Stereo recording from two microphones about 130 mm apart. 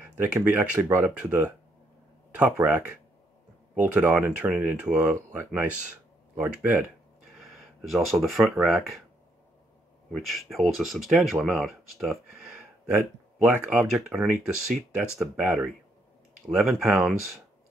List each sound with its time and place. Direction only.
0.0 s speech: 15° right (ahead or behind)
3.8 s speech: 10° right (ahead or behind)
7.3 s speech: centre (ahead or behind)
10.1 s speech: centre (ahead or behind)